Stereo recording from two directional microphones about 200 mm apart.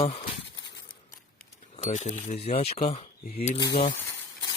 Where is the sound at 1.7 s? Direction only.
35° left (ahead or behind).